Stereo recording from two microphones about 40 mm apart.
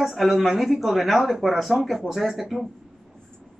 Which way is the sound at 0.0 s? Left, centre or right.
Centre.